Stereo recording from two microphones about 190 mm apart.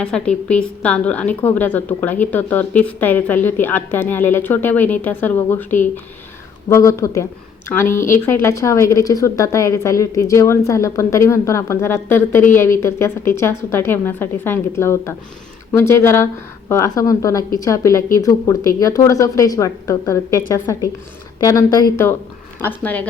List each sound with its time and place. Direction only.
0.0 s a woman's voice: 5° left (ahead or behind)
22.6 s a woman's voice: 10° left (ahead or behind)